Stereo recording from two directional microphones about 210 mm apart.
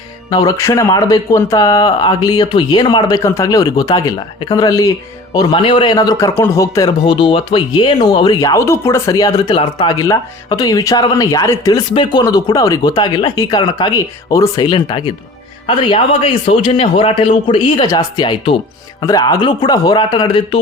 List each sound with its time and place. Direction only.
0.3 s a man's voice: 20° left (ahead or behind)